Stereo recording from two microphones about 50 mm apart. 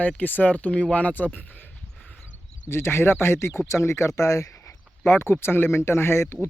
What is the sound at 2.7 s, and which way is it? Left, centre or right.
Speech, left.